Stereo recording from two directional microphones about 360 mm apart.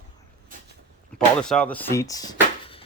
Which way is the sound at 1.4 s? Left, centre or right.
Centre.